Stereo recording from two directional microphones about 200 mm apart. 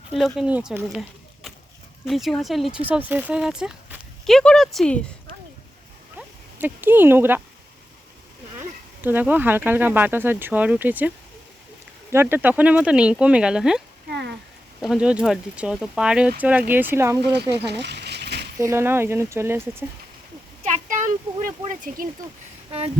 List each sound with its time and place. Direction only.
0.3 s speech: 5° right (ahead or behind)
2.0 s speech: centre (ahead or behind)
6.1 s speech: 10° right (ahead or behind)
9.0 s speech: 10° right (ahead or behind)
12.1 s speech: 10° right (ahead or behind)
14.1 s a sound: 55° right (ahead or behind)
14.8 s speech: 5° right (ahead or behind)
17.7 s a sound: 60° right (ahead or behind)
18.6 s speech: 15° right (ahead or behind)
20.7 s a sound: 40° right (ahead or behind)
21.9 s speech: 40° right (ahead or behind)